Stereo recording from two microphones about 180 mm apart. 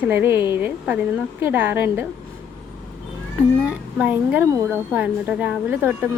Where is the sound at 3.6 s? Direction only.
5° right (ahead or behind).